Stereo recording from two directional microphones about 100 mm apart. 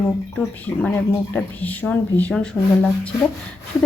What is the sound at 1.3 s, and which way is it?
A woman's voice, 15° left (ahead or behind).